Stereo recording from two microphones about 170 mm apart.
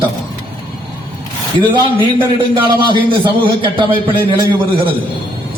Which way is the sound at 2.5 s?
30° right (ahead or behind).